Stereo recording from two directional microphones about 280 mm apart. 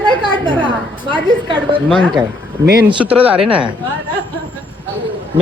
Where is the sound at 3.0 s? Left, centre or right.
Centre.